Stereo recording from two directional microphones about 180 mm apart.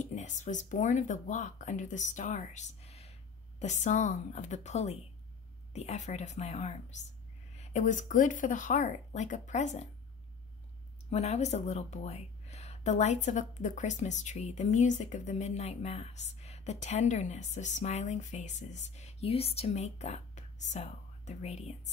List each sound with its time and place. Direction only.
0.0 s speech: 40° left (ahead or behind)
11.1 s speech: 40° left (ahead or behind)